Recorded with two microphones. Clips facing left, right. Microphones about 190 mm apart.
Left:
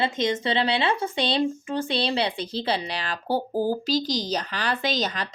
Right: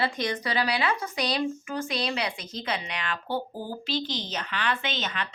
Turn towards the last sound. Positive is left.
turn(degrees=35)  # may be behind; listen again after turning